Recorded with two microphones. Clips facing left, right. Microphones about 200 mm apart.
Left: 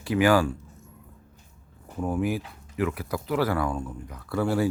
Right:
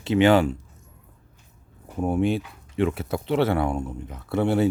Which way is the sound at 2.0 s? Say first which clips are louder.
Right 4 dB; 25° right (ahead or behind).